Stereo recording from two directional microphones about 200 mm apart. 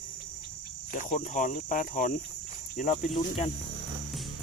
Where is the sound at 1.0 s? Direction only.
40° left (ahead or behind).